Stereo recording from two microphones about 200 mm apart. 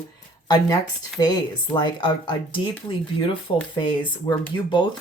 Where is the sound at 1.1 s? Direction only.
20° left (ahead or behind).